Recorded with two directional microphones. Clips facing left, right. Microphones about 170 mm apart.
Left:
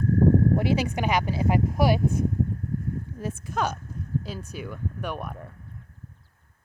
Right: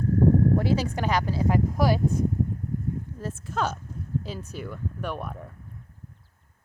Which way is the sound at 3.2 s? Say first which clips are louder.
Left 2 dB; 15° left (ahead or behind).